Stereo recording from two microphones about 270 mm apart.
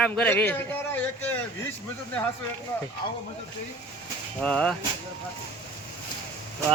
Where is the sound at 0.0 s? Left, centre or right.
Centre.